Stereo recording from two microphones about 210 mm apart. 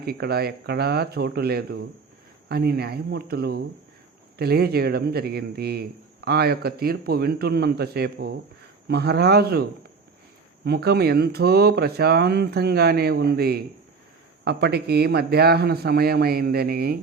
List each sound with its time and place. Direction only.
0.0 s speech: 50° right (ahead or behind)
10.7 s speech: 50° right (ahead or behind)